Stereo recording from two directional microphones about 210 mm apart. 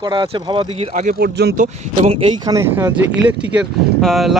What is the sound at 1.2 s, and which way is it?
Speech, 50° right (ahead or behind).